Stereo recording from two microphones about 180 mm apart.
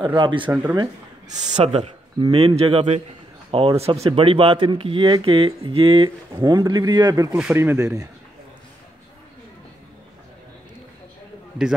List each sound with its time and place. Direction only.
0.0 s speech: 25° right (ahead or behind)
1.5 s a man's voice: 35° right (ahead or behind)
7.3 s speech: 10° right (ahead or behind)